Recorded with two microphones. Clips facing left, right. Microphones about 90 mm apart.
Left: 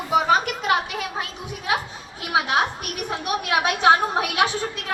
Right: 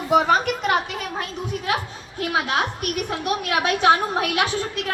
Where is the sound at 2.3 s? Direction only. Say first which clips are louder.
Left 2 dB; 20° left (ahead or behind).